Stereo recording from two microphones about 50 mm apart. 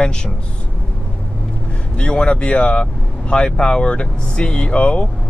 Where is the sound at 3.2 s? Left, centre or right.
Centre.